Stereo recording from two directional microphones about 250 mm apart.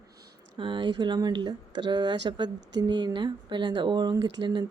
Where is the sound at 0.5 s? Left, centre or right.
Centre.